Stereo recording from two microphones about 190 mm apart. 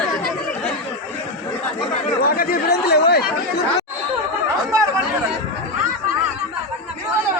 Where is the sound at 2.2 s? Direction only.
50° left (ahead or behind).